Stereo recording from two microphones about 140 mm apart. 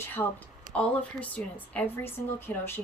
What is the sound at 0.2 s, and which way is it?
Speech, 20° left (ahead or behind).